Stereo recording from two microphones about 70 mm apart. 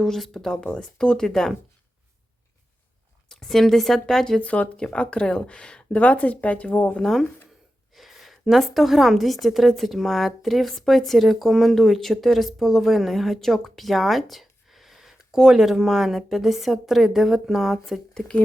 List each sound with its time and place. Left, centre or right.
0.0 s speech: centre
3.2 s a woman's voice: centre
4.4 s speech: centre
7.9 s a woman's voice: centre
18.1 s speech: centre